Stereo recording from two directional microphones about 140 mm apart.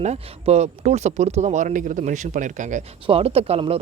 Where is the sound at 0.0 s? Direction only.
50° right (ahead or behind).